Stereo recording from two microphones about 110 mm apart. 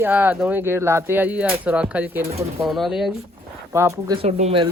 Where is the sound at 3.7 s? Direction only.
25° right (ahead or behind).